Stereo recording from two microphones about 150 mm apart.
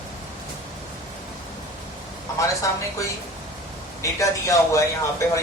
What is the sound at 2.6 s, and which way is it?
Speech, 20° left (ahead or behind).